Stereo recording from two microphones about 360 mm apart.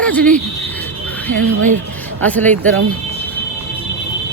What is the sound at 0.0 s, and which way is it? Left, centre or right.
Speech, centre.